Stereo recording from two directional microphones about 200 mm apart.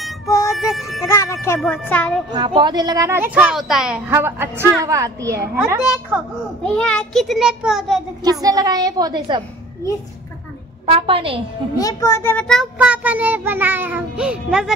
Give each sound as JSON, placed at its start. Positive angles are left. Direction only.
{"t": 0.5, "sound": "music", "side_deg": 0}
{"t": 1.0, "sound": "a child's voice", "side_deg": 15}
{"t": 2.3, "sound": "a woman's voice", "side_deg": -25}
{"t": 6.6, "sound": "a child's voice", "side_deg": 5}
{"t": 8.2, "sound": "a woman's voice", "side_deg": -20}
{"t": 10.9, "sound": "a woman's voice", "side_deg": -25}
{"t": 11.7, "sound": "a child's voice", "side_deg": 20}
{"t": 12.7, "sound": "a woman's voice", "side_deg": -5}